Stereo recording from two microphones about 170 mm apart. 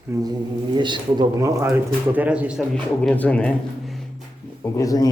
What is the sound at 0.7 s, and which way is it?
A man's voice, 25° right (ahead or behind).